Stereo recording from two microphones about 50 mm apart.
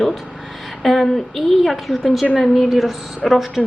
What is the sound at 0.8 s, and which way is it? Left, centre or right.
A woman's voice, centre.